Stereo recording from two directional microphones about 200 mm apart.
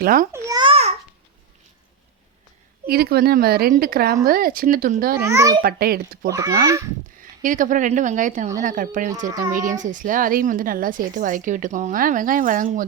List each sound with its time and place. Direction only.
0.0 s a woman's voice: 45° right (ahead or behind)
0.3 s babbling: 15° right (ahead or behind)
2.8 s a woman's voice: 50° right (ahead or behind)
5.2 s a child's voice: 15° right (ahead or behind)
5.6 s a woman's voice: 50° right (ahead or behind)
6.3 s a child's voice: 15° right (ahead or behind)
7.2 s a woman's voice: 40° right (ahead or behind)